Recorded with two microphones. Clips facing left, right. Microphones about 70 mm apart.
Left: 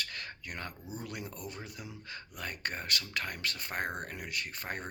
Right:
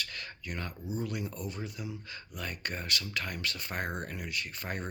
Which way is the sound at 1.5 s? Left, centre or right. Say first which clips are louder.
Right 4 dB; left.